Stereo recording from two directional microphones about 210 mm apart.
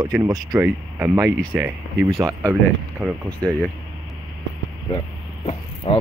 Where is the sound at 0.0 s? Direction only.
15° right (ahead or behind).